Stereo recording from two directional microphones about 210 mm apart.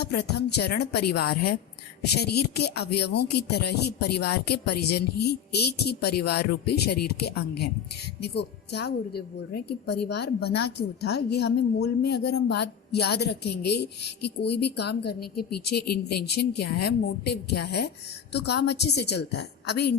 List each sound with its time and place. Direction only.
0.0 s a woman's voice: 50° left (ahead or behind)